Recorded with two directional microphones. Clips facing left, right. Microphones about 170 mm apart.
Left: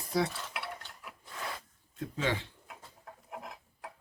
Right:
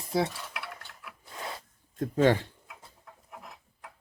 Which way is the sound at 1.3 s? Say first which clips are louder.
Right 1 dB; 25° right (ahead or behind).